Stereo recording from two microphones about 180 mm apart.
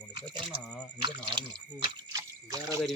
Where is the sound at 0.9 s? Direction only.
25° right (ahead or behind).